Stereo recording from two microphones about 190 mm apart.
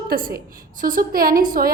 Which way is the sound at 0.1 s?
55° right (ahead or behind).